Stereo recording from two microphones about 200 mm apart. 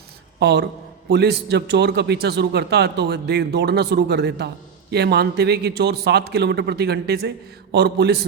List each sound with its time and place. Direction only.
0.3 s a man's voice: 60° right (ahead or behind)